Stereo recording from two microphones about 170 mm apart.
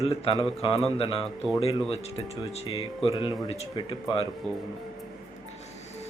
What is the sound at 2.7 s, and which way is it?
Speech, 35° left (ahead or behind).